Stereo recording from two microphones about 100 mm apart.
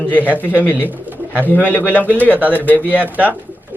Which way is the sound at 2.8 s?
15° right (ahead or behind).